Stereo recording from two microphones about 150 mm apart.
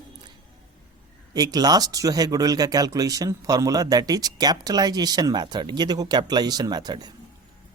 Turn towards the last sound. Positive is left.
turn(degrees=-25)  # may be behind; listen again after turning